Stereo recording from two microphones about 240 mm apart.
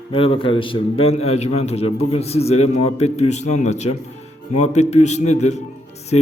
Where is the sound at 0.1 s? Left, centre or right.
Left.